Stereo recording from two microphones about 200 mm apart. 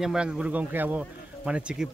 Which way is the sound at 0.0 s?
5° right (ahead or behind).